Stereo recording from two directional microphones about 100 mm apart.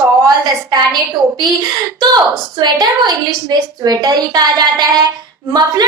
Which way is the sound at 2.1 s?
40° right (ahead or behind).